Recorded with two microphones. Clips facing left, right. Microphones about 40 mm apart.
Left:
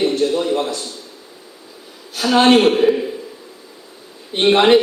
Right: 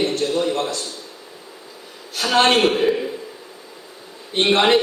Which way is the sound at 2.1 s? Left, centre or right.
Centre.